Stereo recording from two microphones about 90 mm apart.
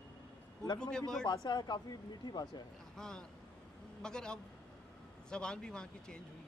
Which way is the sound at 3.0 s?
10° left (ahead or behind).